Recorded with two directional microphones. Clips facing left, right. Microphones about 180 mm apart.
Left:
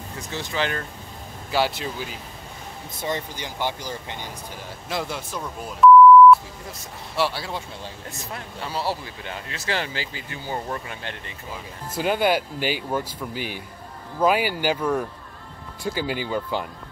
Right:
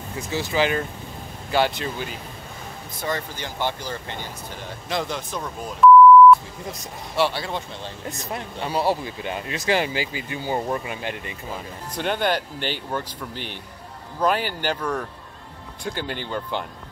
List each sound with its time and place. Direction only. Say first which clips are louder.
0.3 s speech: right 5 dB; 5° right (ahead or behind)
1.5 s speech: right 2 dB; 5° left (ahead or behind)
3.0 s speech: even; 20° left (ahead or behind)
7.2 s speech: right 2 dB; centre (ahead or behind)
8.3 s speech: right 4 dB; 20° right (ahead or behind)
11.9 s speech: left 2 dB; 5° left (ahead or behind)